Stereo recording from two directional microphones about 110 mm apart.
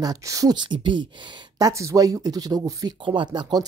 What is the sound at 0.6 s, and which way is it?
Speech, 45° right (ahead or behind).